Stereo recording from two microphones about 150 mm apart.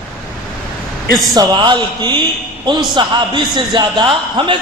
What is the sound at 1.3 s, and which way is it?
A man's voice, 30° right (ahead or behind).